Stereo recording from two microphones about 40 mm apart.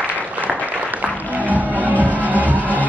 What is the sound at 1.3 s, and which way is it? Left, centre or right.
Music, right.